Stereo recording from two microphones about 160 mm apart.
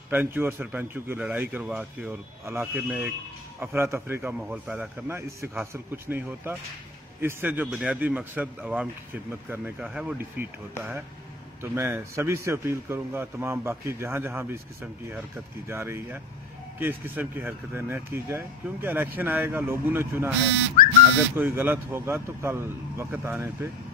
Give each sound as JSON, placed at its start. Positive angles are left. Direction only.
{"t": 0.1, "sound": "a man's voice", "side_deg": -15}
{"t": 21.4, "sound": "a man's voice", "side_deg": -10}